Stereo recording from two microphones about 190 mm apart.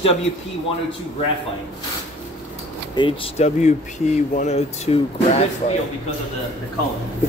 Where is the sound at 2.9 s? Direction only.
25° left (ahead or behind).